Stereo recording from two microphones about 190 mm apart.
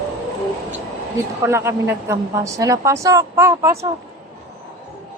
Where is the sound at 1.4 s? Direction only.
15° right (ahead or behind).